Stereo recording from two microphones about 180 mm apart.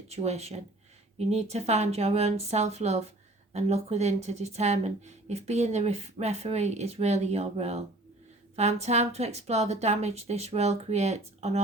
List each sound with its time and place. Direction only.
0.1 s speech: 35° right (ahead or behind)